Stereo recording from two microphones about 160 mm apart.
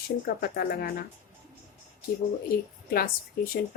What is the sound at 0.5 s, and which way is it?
Speech, 65° left (ahead or behind).